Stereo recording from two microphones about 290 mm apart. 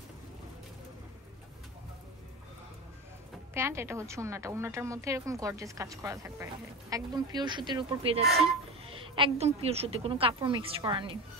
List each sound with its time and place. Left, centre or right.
3.5 s a woman's voice: centre